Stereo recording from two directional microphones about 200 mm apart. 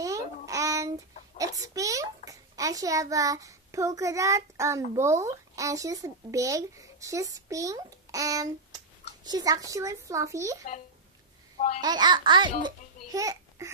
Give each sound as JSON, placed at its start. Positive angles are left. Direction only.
{"t": 0.5, "sound": "child singing", "side_deg": -15}
{"t": 1.7, "sound": "a child's voice", "side_deg": -15}
{"t": 11.5, "sound": "babbling", "side_deg": 35}
{"t": 11.8, "sound": "a child's voice", "side_deg": -20}